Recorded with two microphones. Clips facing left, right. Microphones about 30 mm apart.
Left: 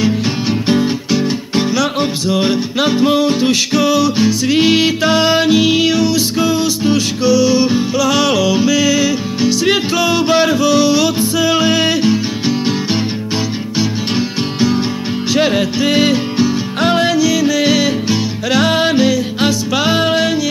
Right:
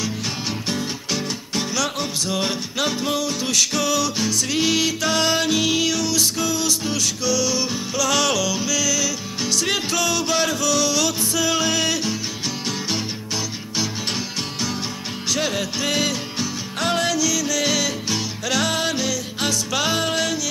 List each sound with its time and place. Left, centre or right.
0.0 s music: left
13.7 s music: left